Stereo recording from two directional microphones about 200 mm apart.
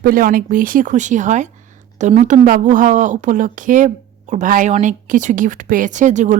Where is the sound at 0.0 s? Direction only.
45° right (ahead or behind).